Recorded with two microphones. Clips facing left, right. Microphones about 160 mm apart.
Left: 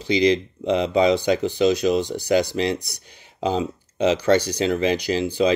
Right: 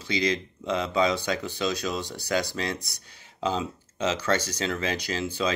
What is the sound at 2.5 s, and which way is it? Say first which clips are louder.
Speech: left 8 dB; 30° left (ahead or behind).